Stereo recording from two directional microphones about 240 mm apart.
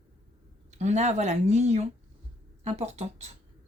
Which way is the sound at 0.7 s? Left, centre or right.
Right.